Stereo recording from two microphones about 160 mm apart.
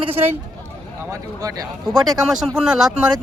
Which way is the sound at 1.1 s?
20° right (ahead or behind).